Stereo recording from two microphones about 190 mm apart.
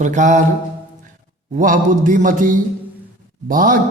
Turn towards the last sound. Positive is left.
turn(degrees=-45)  # may be behind; listen again after turning